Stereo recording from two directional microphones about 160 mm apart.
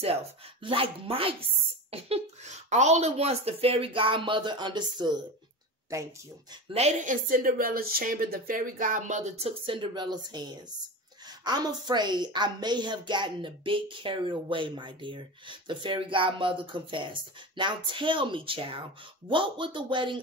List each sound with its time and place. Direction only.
0.0 s a woman's voice: 40° right (ahead or behind); by 6.1 s 20° right (ahead or behind)
6.7 s a woman's voice: 45° right (ahead or behind)